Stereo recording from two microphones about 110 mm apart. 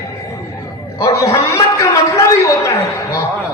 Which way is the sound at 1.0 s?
30° left (ahead or behind).